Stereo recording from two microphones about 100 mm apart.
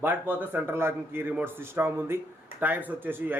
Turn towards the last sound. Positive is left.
turn(degrees=-20)  # may be behind; listen again after turning